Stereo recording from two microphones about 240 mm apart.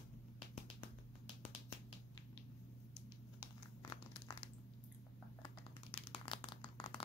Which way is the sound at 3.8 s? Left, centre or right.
Centre.